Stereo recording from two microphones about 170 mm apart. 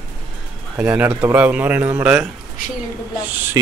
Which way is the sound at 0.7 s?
10° right (ahead or behind).